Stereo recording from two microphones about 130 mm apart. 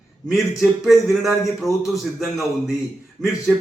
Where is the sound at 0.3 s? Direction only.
Centre (ahead or behind).